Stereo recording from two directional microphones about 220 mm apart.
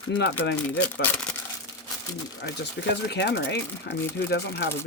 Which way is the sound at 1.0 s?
5° left (ahead or behind).